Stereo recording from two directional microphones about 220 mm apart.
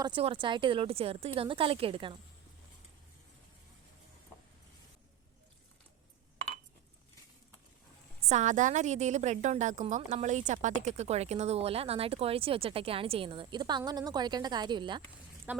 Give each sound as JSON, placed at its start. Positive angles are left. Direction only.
{"t": 0.0, "sound": "a woman's voice", "side_deg": -25}
{"t": 8.3, "sound": "a woman's voice", "side_deg": -35}
{"t": 15.5, "sound": "speech", "side_deg": -10}